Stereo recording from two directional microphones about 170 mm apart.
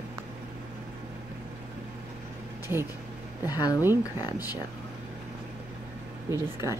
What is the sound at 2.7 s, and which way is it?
Speech, 15° right (ahead or behind).